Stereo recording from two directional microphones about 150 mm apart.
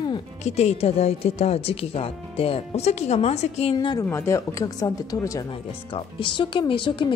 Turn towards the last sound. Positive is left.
turn(degrees=35)  # may be behind; listen again after turning